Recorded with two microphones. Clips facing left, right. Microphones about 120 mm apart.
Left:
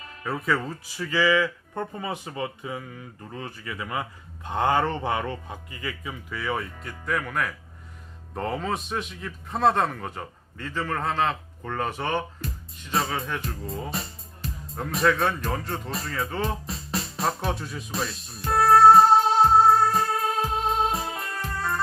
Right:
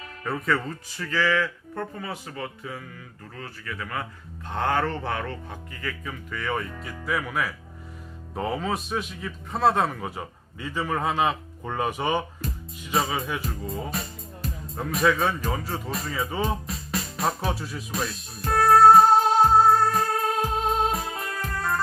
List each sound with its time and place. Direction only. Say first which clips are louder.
0.3 s a man's voice: even; centre (ahead or behind)
12.4 s a man's voice: right 2 dB; centre (ahead or behind)
16.9 s music: even; centre (ahead or behind)
19.9 s music: even; centre (ahead or behind)